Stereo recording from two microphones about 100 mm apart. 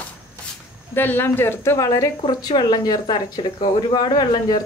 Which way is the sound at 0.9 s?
20° left (ahead or behind).